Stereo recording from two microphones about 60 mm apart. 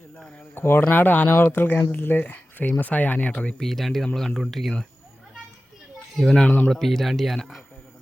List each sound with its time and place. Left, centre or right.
0.5 s speech: left
0.8 s speech: left
3.6 s speech: centre
6.1 s speech: centre